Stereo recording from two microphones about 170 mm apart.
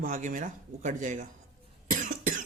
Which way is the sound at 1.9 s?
50° right (ahead or behind).